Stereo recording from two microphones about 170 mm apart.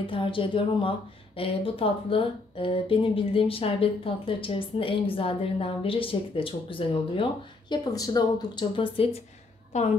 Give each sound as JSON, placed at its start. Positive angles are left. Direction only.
{"t": 0.0, "sound": "a woman's voice", "side_deg": 30}